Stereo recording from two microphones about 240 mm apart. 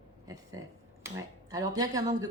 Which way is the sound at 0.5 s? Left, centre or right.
Centre.